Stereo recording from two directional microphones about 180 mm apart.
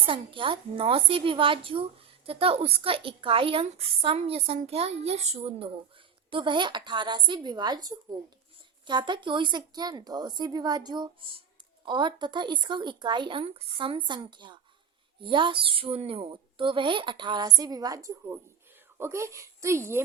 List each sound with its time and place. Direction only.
0.0 s a woman's voice: 30° right (ahead or behind)